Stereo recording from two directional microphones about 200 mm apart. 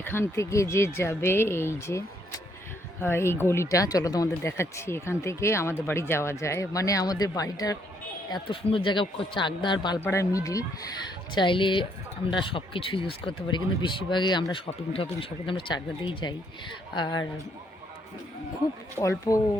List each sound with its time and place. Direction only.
0.0 s speech: 10° left (ahead or behind)
18.9 s speech: 15° left (ahead or behind)